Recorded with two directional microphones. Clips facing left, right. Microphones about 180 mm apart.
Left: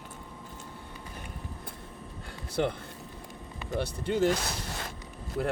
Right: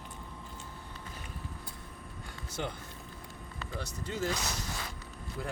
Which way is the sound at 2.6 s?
65° left (ahead or behind).